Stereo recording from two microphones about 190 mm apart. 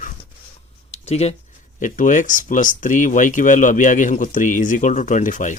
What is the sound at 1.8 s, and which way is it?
Speech, 40° left (ahead or behind).